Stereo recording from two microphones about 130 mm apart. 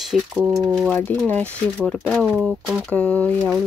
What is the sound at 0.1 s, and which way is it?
Speech, 5° right (ahead or behind).